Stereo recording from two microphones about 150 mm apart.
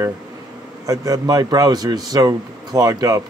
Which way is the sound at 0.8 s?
25° right (ahead or behind).